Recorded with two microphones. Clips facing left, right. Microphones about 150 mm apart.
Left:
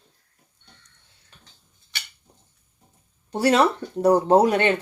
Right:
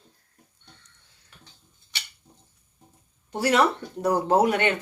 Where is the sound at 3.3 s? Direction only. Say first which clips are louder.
Left 3 dB; 30° left (ahead or behind).